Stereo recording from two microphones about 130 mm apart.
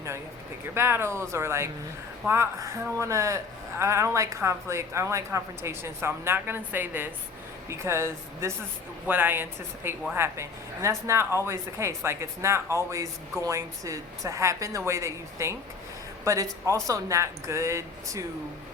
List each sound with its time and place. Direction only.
0.7 s a woman's voice: 20° right (ahead or behind)